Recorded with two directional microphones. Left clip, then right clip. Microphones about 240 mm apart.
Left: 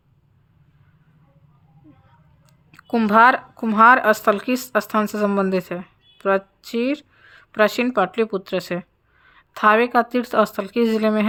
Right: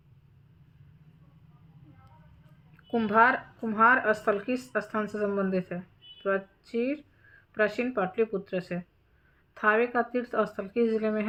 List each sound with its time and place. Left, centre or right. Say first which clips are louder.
2.7 s speech: left 8 dB; left